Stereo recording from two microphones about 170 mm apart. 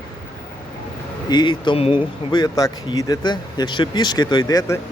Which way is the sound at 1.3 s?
25° left (ahead or behind).